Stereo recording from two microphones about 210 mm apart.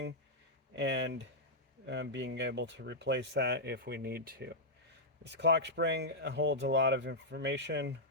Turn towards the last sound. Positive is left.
turn(degrees=-55)  # may be behind; listen again after turning